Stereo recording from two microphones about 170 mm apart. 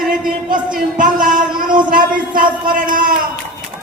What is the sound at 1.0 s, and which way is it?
A man's voice, 50° right (ahead or behind).